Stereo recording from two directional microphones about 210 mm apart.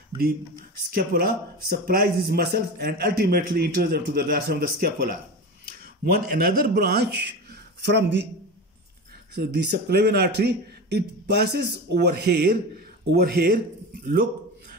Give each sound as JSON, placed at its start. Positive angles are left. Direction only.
{"t": 0.8, "sound": "speech", "side_deg": -45}
{"t": 9.3, "sound": "speech", "side_deg": -50}